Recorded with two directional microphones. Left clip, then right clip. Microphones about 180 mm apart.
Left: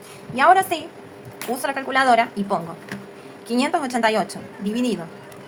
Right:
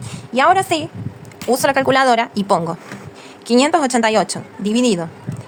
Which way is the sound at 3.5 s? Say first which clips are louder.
Right 8 dB; 55° right (ahead or behind).